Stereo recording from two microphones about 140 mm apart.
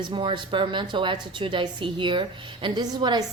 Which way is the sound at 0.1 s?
35° right (ahead or behind).